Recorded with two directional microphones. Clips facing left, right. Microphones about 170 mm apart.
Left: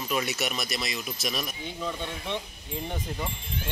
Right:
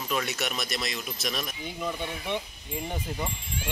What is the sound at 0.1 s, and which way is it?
Speech, 5° left (ahead or behind).